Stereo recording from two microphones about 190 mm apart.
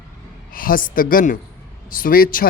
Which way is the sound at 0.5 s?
50° left (ahead or behind).